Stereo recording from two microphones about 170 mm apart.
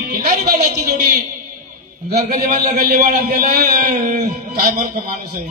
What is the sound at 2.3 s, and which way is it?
A man's voice, 55° right (ahead or behind).